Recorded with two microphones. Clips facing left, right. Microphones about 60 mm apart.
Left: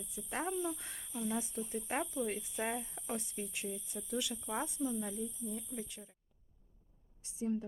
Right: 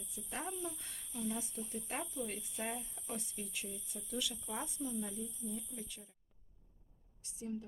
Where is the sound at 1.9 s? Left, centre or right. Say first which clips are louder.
Left 6 dB; left.